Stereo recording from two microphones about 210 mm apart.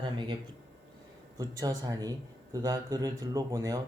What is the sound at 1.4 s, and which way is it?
A man's voice, 20° right (ahead or behind).